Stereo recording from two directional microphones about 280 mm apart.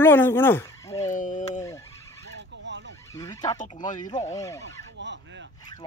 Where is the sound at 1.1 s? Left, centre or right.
Left.